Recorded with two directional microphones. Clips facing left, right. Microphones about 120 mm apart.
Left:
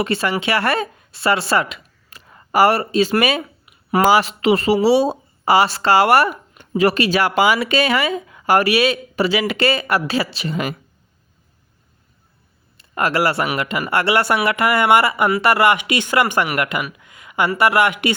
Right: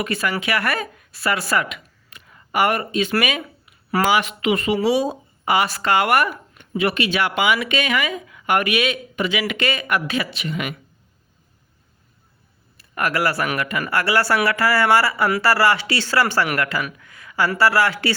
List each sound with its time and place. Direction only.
0.0 s speech: 30° left (ahead or behind)
12.7 s speech: 25° left (ahead or behind)
17.0 s a sound: 20° left (ahead or behind)
17.6 s speech: 20° left (ahead or behind)